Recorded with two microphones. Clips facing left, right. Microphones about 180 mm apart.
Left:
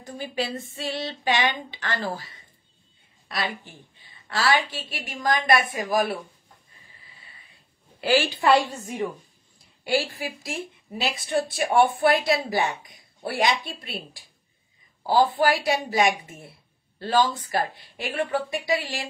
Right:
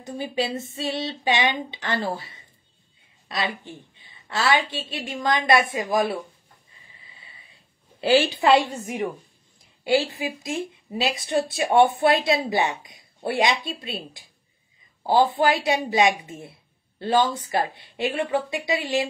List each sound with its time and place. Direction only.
0.0 s speech: 20° right (ahead or behind)
3.6 s speech: 25° right (ahead or behind)
8.0 s speech: 25° right (ahead or behind)